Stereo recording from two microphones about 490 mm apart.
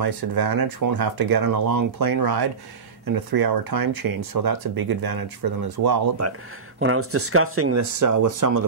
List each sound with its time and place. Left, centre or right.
0.0 s speech: right